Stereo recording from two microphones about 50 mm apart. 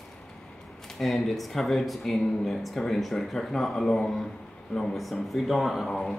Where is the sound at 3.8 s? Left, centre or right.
Centre.